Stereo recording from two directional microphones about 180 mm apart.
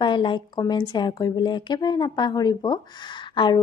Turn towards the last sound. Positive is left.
turn(degrees=25)  # may be behind; listen again after turning